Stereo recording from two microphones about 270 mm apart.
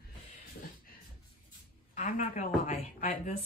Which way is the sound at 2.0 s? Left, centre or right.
Left.